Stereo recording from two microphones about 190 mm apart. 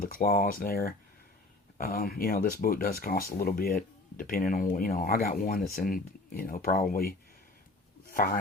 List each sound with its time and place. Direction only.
0.0 s speech: 50° left (ahead or behind)
8.1 s a man's voice: 50° left (ahead or behind)